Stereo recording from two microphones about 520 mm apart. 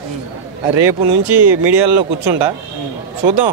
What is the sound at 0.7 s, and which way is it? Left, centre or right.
Speech, right.